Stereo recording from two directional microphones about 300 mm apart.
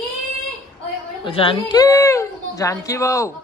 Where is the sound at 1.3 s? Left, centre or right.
Centre.